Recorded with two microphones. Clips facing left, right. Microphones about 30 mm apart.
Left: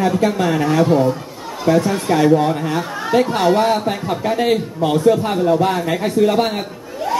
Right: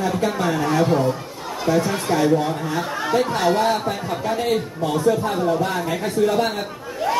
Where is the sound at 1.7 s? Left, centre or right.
Left.